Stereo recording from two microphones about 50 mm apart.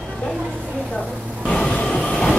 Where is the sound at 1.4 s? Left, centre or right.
Centre.